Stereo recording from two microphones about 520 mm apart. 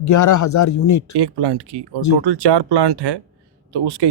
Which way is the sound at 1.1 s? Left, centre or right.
Right.